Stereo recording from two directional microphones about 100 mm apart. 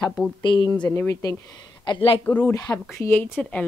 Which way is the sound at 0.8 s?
25° left (ahead or behind).